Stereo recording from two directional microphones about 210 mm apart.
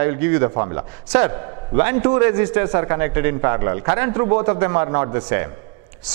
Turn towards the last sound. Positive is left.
turn(degrees=-15)  # may be behind; listen again after turning